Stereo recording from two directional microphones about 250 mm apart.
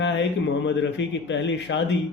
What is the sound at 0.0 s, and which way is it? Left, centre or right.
A man's voice, left.